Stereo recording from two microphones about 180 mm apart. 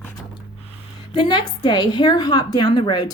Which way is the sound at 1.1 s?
25° left (ahead or behind).